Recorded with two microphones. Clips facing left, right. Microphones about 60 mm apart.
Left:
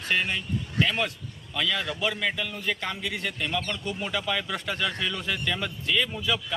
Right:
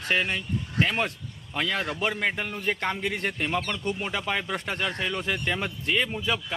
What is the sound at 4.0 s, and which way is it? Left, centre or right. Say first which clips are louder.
Speech: even; right.